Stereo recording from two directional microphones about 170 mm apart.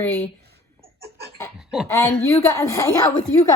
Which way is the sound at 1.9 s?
15° left (ahead or behind).